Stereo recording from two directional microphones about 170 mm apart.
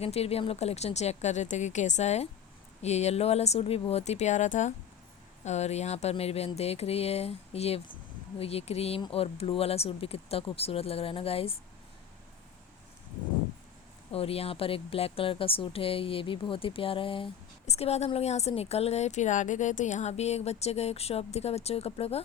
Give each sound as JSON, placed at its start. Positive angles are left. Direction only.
{"t": 0.0, "sound": "a woman's voice", "side_deg": 35}
{"t": 14.1, "sound": "a woman's voice", "side_deg": 35}